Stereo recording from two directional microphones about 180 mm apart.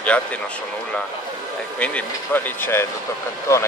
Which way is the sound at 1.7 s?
5° left (ahead or behind).